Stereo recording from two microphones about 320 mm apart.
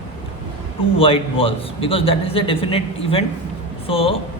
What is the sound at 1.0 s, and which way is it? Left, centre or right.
A man's voice, centre.